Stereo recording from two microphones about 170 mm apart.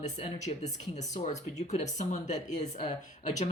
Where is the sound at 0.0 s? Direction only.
40° left (ahead or behind).